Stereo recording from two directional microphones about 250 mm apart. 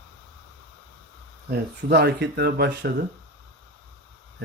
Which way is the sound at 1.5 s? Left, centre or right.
Right.